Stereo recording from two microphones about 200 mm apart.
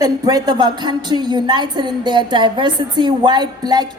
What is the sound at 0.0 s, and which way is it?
A woman's voice, 20° right (ahead or behind).